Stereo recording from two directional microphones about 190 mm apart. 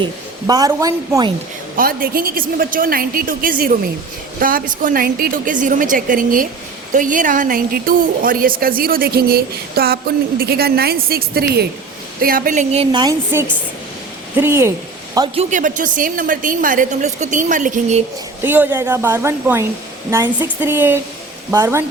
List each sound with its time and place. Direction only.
0.0 s a woman's voice: 20° right (ahead or behind)
1.7 s a woman's voice: 50° right (ahead or behind)
12.2 s a woman's voice: 45° right (ahead or behind); by 14.7 s 15° right (ahead or behind)
15.4 s a woman's voice: 40° right (ahead or behind)
18.4 s a woman's voice: 10° right (ahead or behind)